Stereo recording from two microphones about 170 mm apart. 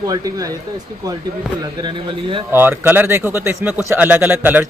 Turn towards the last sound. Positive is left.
turn(degrees=-10)  # may be behind; listen again after turning